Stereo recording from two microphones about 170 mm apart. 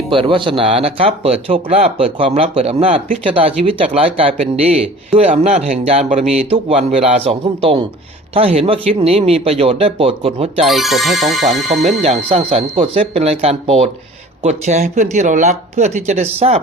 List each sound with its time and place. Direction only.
0.1 s speech: 30° right (ahead or behind)
10.7 s speech: centre (ahead or behind)
11.7 s speech: 35° right (ahead or behind)